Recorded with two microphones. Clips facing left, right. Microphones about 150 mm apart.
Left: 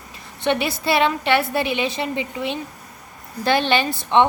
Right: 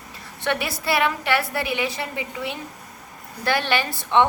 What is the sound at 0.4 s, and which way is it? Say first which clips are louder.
A woman's voice: left 4 dB; 20° left (ahead or behind).